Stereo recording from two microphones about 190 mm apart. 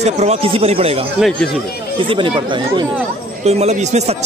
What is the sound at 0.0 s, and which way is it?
Speech, 35° right (ahead or behind).